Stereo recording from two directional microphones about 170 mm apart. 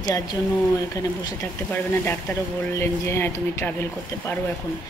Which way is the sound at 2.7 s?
15° left (ahead or behind).